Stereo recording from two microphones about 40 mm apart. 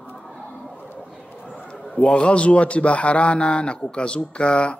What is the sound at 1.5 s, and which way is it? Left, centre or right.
A man's voice, left.